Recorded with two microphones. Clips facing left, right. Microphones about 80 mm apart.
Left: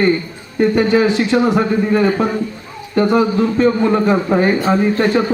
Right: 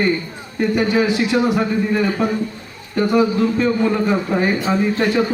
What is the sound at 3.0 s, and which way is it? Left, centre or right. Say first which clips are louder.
A man's voice: even; left.